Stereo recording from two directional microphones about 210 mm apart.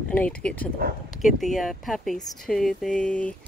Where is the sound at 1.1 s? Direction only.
Centre (ahead or behind).